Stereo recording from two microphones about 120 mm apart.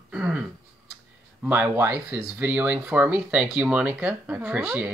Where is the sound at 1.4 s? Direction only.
15° right (ahead or behind).